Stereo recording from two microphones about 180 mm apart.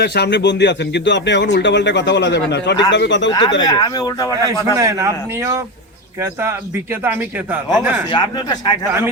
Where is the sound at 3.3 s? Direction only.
25° left (ahead or behind).